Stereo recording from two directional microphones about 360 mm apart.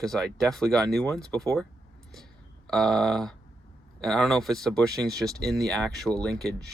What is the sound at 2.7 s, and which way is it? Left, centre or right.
Speech, centre.